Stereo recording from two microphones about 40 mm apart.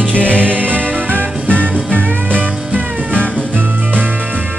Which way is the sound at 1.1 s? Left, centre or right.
Right.